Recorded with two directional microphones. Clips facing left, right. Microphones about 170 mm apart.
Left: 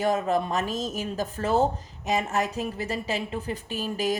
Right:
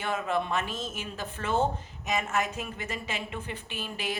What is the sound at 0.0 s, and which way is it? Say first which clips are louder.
Speech: left 6 dB; 40° left (ahead or behind).